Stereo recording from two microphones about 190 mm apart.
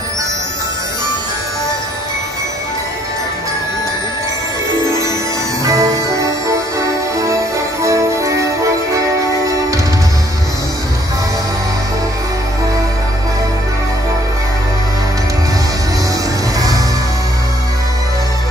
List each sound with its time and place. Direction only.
5.7 s music: 15° right (ahead or behind)
7.8 s music: 15° right (ahead or behind)
16.5 s music: 20° right (ahead or behind)